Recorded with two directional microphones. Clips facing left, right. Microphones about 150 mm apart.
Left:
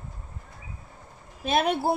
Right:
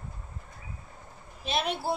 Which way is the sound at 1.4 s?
50° left (ahead or behind).